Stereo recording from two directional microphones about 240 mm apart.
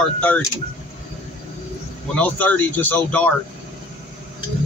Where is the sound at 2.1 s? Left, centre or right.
Centre.